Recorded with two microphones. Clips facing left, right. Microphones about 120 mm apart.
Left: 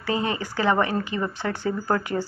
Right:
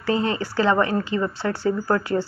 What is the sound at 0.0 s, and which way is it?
Speech, 15° left (ahead or behind).